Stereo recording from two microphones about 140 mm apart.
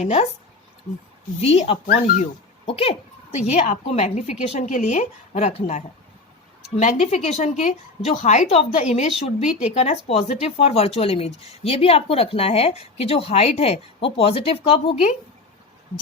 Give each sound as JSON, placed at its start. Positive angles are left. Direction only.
{"t": 1.4, "sound": "a woman's voice", "side_deg": 45}
{"t": 4.7, "sound": "a woman's voice", "side_deg": 60}